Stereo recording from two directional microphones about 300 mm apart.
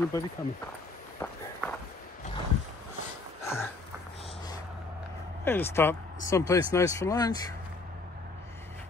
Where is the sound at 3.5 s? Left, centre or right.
Centre.